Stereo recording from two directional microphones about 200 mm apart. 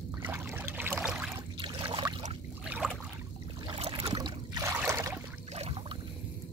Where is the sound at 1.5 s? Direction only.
25° right (ahead or behind).